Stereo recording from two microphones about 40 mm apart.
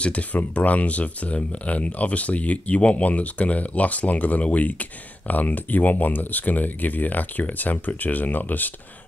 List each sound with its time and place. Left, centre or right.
0.0 s speech: left